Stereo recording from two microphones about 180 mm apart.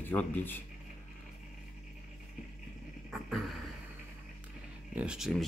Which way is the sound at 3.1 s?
Centre (ahead or behind).